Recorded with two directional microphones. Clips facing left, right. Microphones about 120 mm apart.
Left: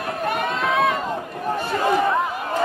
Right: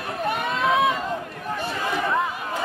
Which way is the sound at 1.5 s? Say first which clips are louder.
Left 6 dB; 45° left (ahead or behind).